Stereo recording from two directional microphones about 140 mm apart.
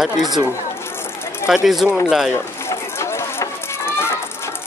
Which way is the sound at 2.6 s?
20° left (ahead or behind).